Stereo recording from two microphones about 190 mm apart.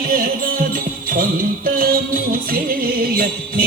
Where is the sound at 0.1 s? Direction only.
50° right (ahead or behind).